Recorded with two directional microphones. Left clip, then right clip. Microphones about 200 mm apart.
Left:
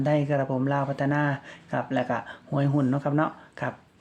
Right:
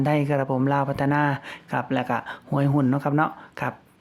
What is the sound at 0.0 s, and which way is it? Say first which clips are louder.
Speech: right 2 dB; 30° right (ahead or behind).